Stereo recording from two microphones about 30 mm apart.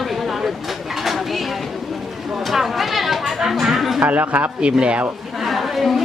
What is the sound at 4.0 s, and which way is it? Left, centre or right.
Speech, right.